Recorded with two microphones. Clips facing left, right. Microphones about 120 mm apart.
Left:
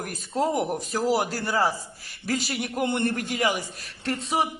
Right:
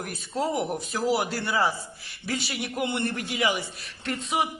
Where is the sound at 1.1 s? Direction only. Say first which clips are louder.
Left 1 dB; 35° left (ahead or behind).